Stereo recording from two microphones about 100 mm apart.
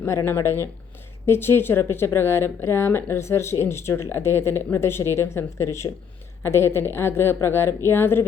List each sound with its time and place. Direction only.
0.0 s speech: 25° left (ahead or behind)